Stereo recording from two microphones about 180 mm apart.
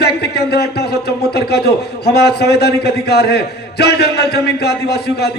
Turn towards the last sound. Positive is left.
turn(degrees=65)  # may be behind; listen again after turning